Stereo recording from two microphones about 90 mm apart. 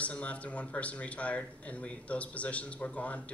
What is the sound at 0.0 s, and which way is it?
Speech, 15° left (ahead or behind).